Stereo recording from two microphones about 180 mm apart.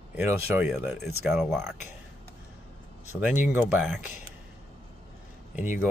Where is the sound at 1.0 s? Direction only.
Centre (ahead or behind).